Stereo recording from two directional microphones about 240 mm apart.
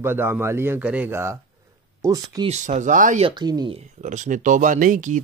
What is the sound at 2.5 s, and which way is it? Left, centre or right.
Speech, right.